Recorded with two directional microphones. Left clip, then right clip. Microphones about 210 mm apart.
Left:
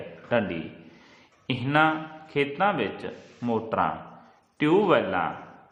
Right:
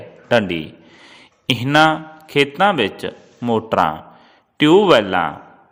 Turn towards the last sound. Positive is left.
turn(degrees=-40)  # may be behind; listen again after turning